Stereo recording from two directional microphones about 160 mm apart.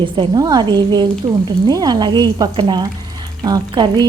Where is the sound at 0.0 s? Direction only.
25° right (ahead or behind).